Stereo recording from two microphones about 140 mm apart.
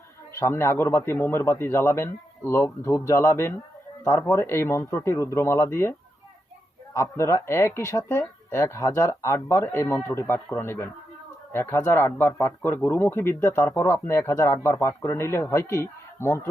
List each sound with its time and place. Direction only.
0.3 s a man's voice: 20° left (ahead or behind)
6.9 s a man's voice: 20° left (ahead or behind)